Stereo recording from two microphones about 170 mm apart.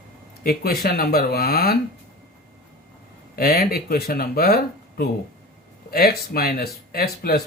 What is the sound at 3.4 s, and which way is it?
Speech, 60° left (ahead or behind).